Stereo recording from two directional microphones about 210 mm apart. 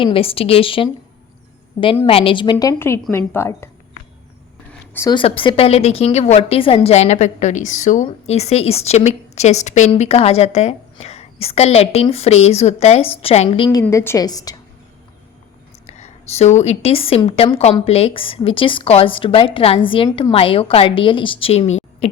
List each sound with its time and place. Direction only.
0.0 s a woman's voice: 25° left (ahead or behind)
2.0 s a woman's voice: 25° left (ahead or behind)
4.9 s a woman's voice: 20° left (ahead or behind)
13.7 s a woman's voice: 15° left (ahead or behind)
15.9 s a woman's voice: 30° left (ahead or behind)